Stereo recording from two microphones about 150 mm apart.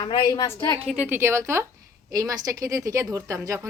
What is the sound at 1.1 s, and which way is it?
Speech, 15° right (ahead or behind).